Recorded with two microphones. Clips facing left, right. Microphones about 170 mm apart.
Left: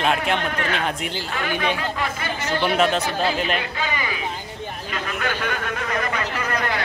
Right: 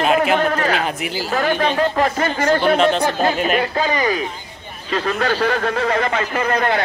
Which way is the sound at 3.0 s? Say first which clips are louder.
Right 5 dB; 45° right (ahead or behind).